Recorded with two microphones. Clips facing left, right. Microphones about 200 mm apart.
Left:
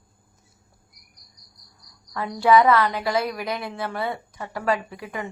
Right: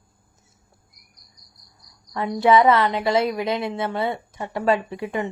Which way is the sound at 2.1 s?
25° right (ahead or behind).